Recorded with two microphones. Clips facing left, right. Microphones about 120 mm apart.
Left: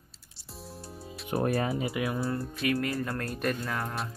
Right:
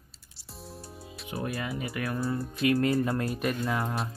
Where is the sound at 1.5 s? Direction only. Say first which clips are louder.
Left 4 dB; 30° left (ahead or behind).